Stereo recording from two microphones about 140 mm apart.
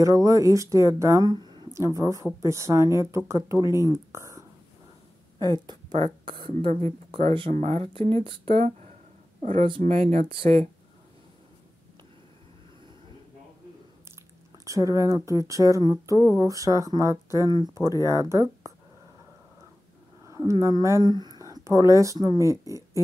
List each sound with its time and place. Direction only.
0.0 s speech: 25° right (ahead or behind)
5.4 s speech: 30° right (ahead or behind)
14.7 s speech: 25° right (ahead or behind)
20.2 s a sound: 20° right (ahead or behind)
20.8 s speech: 20° right (ahead or behind)